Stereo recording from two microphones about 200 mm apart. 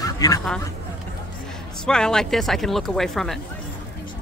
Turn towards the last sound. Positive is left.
turn(degrees=0)  # may be behind; listen again after turning